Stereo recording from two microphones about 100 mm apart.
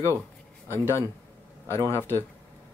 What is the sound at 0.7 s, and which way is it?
Speech, 25° left (ahead or behind).